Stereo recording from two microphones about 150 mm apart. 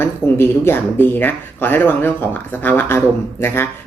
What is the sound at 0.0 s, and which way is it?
Speech, 15° left (ahead or behind).